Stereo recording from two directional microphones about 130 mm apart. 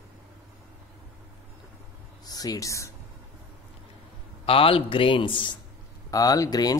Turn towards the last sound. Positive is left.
turn(degrees=30)  # may be behind; listen again after turning